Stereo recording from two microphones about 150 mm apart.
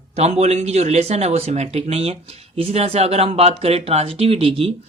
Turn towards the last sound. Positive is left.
turn(degrees=-40)  # may be behind; listen again after turning